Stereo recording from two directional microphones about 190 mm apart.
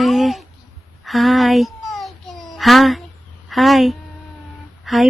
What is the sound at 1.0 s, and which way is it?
Babbling, centre (ahead or behind).